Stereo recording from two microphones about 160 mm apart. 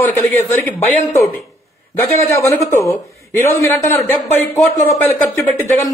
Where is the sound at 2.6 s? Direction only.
15° left (ahead or behind).